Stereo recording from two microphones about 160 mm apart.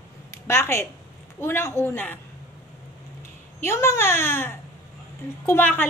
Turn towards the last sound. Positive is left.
turn(degrees=10)  # may be behind; listen again after turning